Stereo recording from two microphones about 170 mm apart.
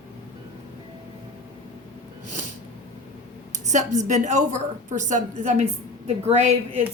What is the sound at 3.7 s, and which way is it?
A woman's voice, 45° right (ahead or behind).